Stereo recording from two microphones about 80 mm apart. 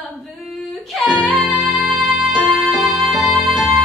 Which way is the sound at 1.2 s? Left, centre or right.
Centre.